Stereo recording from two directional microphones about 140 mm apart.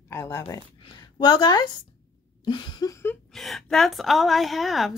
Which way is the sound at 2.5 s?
30° left (ahead or behind).